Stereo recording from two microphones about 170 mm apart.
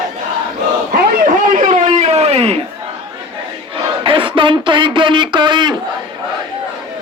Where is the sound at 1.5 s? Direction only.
45° right (ahead or behind).